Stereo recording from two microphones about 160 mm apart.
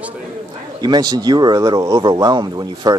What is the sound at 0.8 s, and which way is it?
Speech, 25° right (ahead or behind).